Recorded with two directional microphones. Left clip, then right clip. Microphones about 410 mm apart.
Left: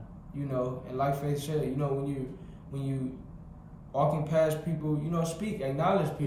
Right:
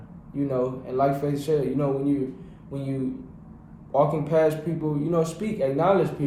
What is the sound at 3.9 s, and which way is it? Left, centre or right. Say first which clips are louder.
A man's voice: right 6 dB; centre.